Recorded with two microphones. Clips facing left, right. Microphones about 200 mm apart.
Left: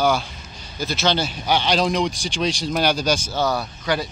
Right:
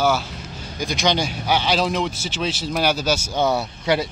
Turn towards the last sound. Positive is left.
turn(degrees=-25)  # may be behind; listen again after turning